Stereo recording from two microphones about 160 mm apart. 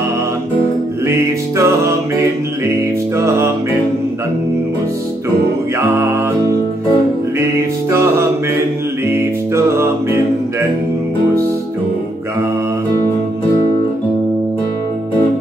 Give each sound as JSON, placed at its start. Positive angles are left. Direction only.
{"t": 1.0, "sound": "music", "side_deg": -15}
{"t": 7.9, "sound": "music", "side_deg": -15}